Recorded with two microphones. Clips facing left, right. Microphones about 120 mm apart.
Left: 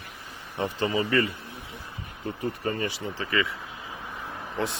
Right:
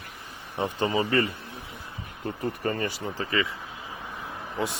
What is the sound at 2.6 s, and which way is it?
Speech, 45° right (ahead or behind).